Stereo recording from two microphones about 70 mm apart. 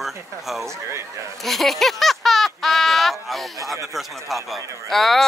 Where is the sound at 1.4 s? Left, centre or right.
Centre.